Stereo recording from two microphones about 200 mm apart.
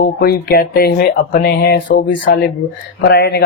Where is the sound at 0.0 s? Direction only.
50° left (ahead or behind).